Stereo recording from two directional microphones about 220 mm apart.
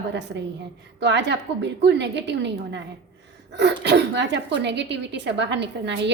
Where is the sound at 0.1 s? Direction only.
50° right (ahead or behind).